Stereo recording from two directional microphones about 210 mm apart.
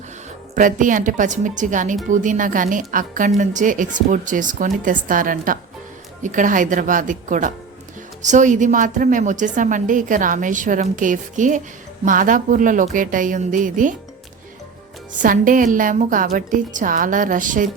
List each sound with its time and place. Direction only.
0.5 s a woman's voice: 40° right (ahead or behind)
15.2 s a woman's voice: 40° right (ahead or behind)